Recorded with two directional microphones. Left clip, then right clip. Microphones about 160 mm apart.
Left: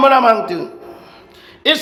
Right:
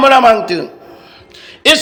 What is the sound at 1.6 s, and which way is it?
Speech, 15° right (ahead or behind).